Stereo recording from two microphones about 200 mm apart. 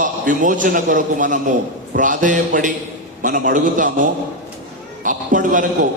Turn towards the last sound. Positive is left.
turn(degrees=-40)  # may be behind; listen again after turning